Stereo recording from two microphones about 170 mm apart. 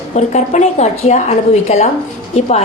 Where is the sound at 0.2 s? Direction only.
45° left (ahead or behind).